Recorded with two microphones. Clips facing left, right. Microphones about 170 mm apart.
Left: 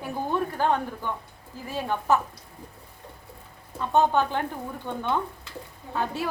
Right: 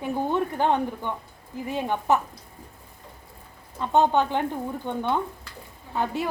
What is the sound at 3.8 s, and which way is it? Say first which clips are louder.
A woman's voice: right 1 dB; 20° right (ahead or behind).